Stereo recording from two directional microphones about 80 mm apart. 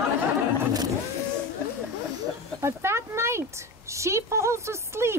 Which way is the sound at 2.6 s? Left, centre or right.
Right.